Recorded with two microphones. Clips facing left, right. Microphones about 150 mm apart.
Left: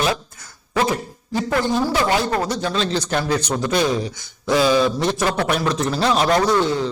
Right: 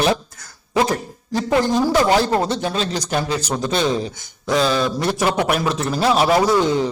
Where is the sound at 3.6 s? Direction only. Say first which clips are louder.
Even; 25° right (ahead or behind).